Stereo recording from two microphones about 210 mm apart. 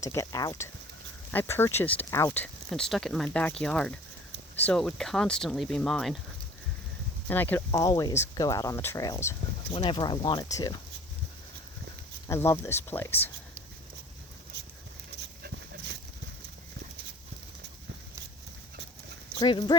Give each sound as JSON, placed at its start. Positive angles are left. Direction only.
{"t": 0.0, "sound": "speech", "side_deg": 15}
{"t": 7.3, "sound": "speech", "side_deg": 10}
{"t": 12.3, "sound": "speech", "side_deg": 10}
{"t": 15.4, "sound": "dog", "side_deg": -55}
{"t": 19.4, "sound": "speech", "side_deg": 20}